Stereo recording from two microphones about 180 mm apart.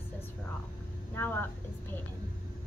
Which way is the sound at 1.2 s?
10° left (ahead or behind).